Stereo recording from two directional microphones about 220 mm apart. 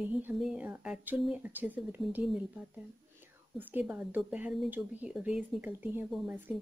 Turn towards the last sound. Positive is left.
turn(degrees=-5)  # may be behind; listen again after turning